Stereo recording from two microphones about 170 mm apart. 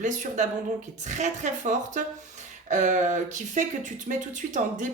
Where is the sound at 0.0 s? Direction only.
45° right (ahead or behind).